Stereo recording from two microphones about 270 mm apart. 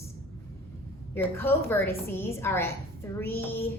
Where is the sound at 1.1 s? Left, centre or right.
Centre.